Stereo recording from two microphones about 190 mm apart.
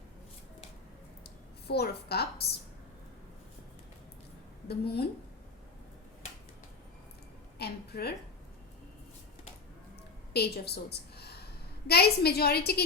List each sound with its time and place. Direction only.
1.2 s speech: 55° left (ahead or behind)
4.7 s a woman's voice: 55° left (ahead or behind)
7.6 s a woman's voice: 60° left (ahead or behind)
10.3 s a woman's voice: 60° left (ahead or behind)